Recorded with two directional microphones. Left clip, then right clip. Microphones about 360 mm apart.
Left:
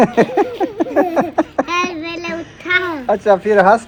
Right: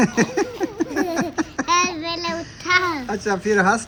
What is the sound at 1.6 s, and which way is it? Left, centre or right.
Child singing, centre.